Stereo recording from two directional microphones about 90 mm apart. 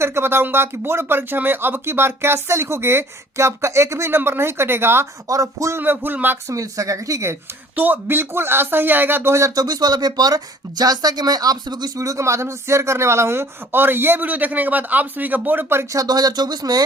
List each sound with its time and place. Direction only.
0.0 s speech: 30° right (ahead or behind)
5.3 s speech: 35° right (ahead or behind)
5.8 s speech: 20° right (ahead or behind)
6.5 s speech: 35° right (ahead or behind)
7.8 s speech: 20° right (ahead or behind); by 11.9 s 50° right (ahead or behind)
11.9 s speech: 35° right (ahead or behind)
16.0 s speech: 45° right (ahead or behind)